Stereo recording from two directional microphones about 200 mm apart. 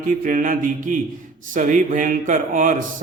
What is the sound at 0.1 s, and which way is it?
Speech, 45° right (ahead or behind).